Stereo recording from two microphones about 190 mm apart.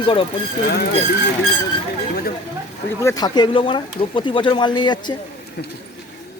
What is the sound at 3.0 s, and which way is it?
Speech, 20° left (ahead or behind).